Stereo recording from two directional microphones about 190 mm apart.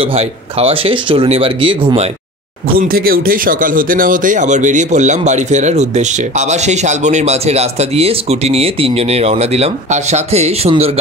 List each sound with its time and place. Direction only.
0.0 s speech: 30° right (ahead or behind)
2.8 s speech: 50° right (ahead or behind); by 10.9 s 35° right (ahead or behind)